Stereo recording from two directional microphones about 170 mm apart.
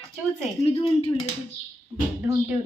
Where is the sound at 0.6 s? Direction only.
35° left (ahead or behind).